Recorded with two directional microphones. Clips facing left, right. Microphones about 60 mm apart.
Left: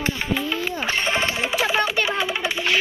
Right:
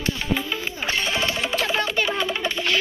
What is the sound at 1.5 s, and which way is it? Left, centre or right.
Music, centre.